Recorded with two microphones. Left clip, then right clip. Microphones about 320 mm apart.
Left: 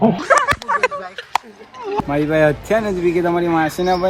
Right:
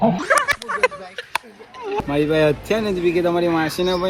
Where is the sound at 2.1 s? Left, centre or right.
Centre.